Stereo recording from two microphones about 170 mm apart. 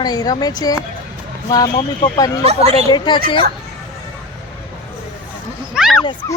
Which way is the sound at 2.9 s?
25° left (ahead or behind).